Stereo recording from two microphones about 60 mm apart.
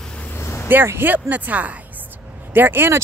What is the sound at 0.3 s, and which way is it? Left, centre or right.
Vehicle, left.